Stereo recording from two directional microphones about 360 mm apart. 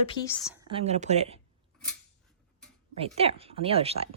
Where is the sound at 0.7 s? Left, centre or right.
Centre.